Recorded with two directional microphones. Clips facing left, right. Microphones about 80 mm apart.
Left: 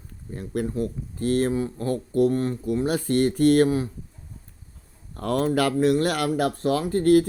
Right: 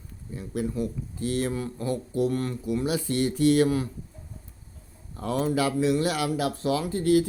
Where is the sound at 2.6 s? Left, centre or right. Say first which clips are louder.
Left 3 dB; left.